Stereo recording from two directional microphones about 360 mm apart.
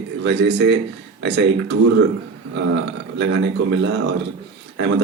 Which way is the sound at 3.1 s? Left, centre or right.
Right.